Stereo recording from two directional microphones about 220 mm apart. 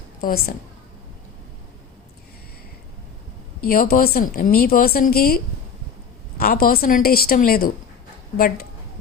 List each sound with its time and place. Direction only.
0.2 s a woman's voice: 40° left (ahead or behind)
3.7 s speech: 40° left (ahead or behind)
6.4 s a woman's voice: 40° left (ahead or behind)